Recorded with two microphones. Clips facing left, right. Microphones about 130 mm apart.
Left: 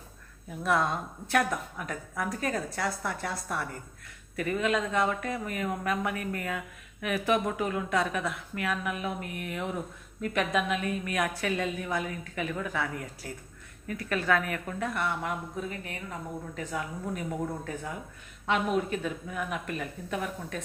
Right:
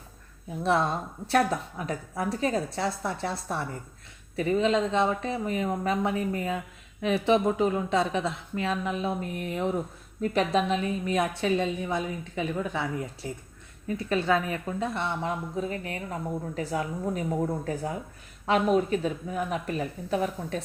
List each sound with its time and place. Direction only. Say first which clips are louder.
0.6 s a woman's voice: right 2 dB; 30° right (ahead or behind)
15.7 s a woman's voice: right 5 dB; 35° right (ahead or behind)
18.4 s a woman's voice: right 4 dB; 35° right (ahead or behind)